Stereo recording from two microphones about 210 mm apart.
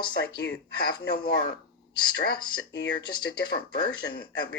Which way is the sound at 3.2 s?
50° left (ahead or behind).